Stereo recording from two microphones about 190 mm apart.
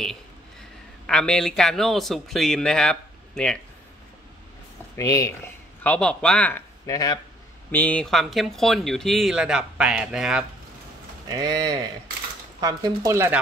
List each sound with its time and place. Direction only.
1.0 s speech: 5° left (ahead or behind)
4.9 s speech: 15° left (ahead or behind)
5.9 s speech: 5° left (ahead or behind)
7.7 s speech: 10° left (ahead or behind)
11.2 s speech: 20° right (ahead or behind)